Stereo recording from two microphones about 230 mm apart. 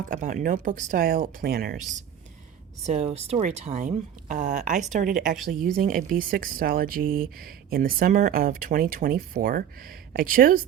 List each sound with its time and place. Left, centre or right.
0.0 s speech: right
2.8 s speech: right